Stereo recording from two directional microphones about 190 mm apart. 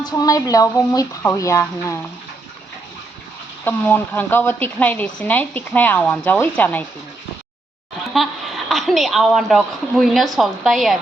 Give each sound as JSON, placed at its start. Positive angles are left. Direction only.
{"t": 0.1, "sound": "a woman's voice", "side_deg": 20}
{"t": 3.6, "sound": "a woman's voice", "side_deg": 10}
{"t": 8.1, "sound": "a woman's voice", "side_deg": 0}